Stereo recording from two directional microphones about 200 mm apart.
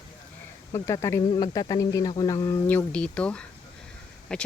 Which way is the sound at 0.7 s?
15° left (ahead or behind).